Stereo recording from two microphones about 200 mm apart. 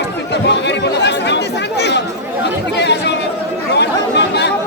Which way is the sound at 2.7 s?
60° left (ahead or behind).